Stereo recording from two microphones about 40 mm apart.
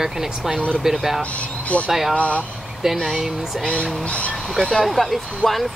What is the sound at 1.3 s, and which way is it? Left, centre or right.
Speech, left.